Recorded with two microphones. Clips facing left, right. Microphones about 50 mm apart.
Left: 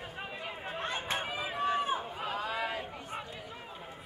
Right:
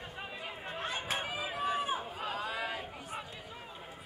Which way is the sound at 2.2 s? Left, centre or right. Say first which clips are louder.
Left 2 dB; centre.